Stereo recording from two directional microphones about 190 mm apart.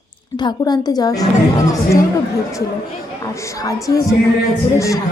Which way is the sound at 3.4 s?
15° left (ahead or behind).